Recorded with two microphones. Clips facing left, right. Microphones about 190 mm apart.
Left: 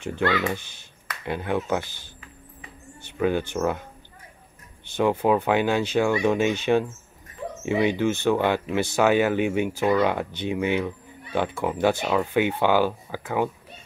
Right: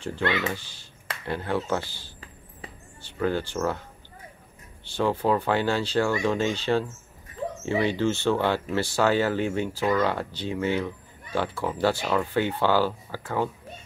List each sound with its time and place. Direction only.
0.2 s speech: 25° right (ahead or behind)
1.2 s speech: 15° left (ahead or behind)
3.2 s speech: 15° left (ahead or behind)
4.9 s speech: 15° left (ahead or behind)